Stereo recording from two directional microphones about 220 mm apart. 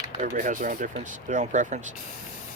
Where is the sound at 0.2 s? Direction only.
35° right (ahead or behind).